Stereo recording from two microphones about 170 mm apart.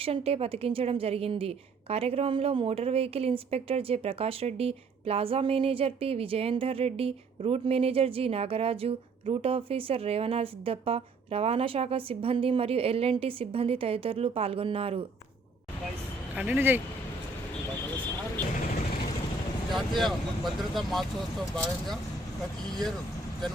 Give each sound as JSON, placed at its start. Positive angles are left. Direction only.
{"t": 0.0, "sound": "a woman's voice", "side_deg": -35}
{"t": 16.3, "sound": "speech", "side_deg": -10}
{"t": 19.7, "sound": "speech", "side_deg": 0}